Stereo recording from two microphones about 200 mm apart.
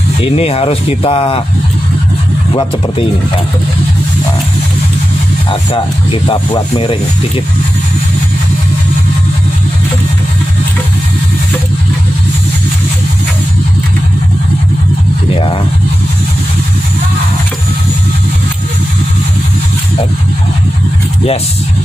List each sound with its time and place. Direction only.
0.2 s speech: 30° left (ahead or behind)
6.2 s speech: 25° left (ahead or behind)